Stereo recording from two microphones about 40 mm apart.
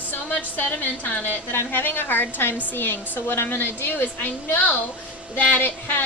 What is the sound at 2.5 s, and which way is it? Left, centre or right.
A woman's voice, left.